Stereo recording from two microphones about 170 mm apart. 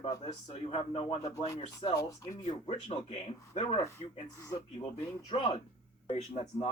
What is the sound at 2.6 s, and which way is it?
Speech, 30° left (ahead or behind).